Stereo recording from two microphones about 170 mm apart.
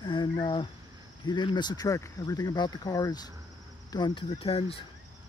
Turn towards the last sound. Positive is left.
turn(degrees=35)  # may be behind; listen again after turning